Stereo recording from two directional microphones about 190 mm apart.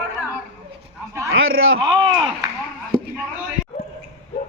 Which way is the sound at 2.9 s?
25° right (ahead or behind).